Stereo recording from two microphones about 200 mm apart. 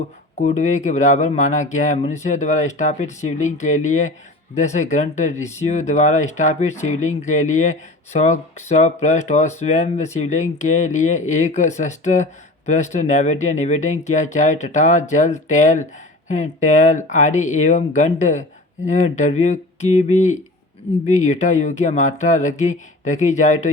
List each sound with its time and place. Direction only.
0.3 s speech: 35° left (ahead or behind)